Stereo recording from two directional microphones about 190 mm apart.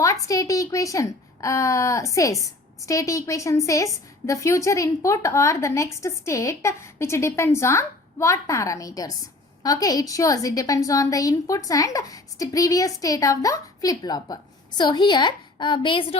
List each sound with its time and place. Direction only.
0.0 s a woman's voice: 15° left (ahead or behind)